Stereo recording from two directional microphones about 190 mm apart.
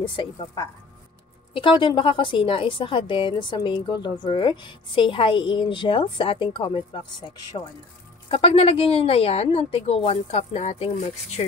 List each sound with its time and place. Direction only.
0.0 s a woman's voice: 25° left (ahead or behind)